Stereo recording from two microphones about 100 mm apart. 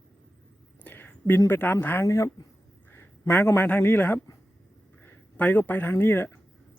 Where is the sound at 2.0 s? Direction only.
30° left (ahead or behind).